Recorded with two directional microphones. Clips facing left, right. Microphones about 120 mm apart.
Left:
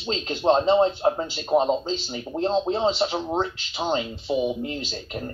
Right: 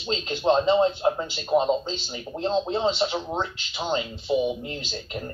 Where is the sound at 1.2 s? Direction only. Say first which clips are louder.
Left 1 dB; 15° left (ahead or behind).